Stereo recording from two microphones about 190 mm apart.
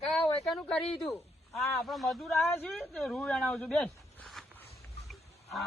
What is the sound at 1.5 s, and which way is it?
Speech, centre (ahead or behind).